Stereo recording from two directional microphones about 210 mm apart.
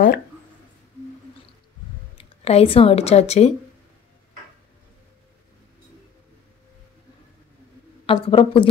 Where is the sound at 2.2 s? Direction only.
30° left (ahead or behind).